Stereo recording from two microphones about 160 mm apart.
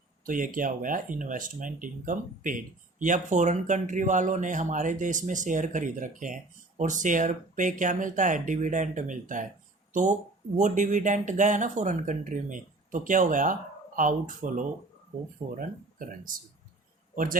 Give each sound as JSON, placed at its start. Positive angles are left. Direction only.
{"t": 0.3, "sound": "speech", "side_deg": -60}